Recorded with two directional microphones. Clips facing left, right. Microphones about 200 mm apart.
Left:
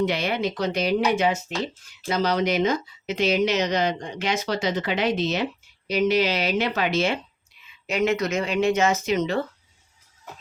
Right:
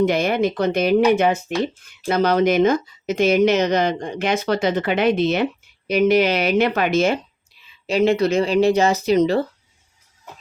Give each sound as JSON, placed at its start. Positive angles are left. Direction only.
{"t": 0.0, "sound": "speech", "side_deg": -50}
{"t": 7.9, "sound": "speech", "side_deg": -30}